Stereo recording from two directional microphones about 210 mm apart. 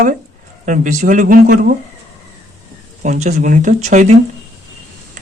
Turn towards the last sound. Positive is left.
turn(degrees=-35)  # may be behind; listen again after turning